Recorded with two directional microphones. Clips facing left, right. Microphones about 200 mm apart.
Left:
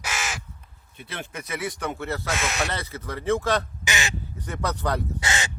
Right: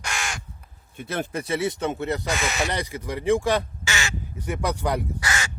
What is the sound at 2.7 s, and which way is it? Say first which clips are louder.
Speech: right 4 dB; 15° right (ahead or behind).